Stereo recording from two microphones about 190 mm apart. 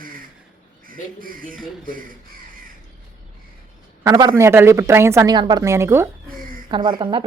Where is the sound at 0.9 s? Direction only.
45° right (ahead or behind).